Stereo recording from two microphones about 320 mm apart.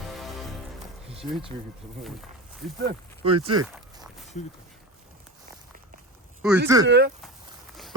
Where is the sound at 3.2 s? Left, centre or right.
Centre.